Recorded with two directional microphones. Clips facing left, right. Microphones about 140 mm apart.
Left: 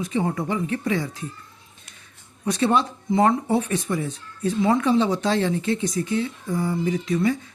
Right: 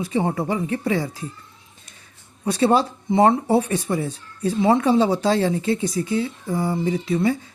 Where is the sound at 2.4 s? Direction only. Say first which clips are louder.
Right 3 dB; 30° right (ahead or behind).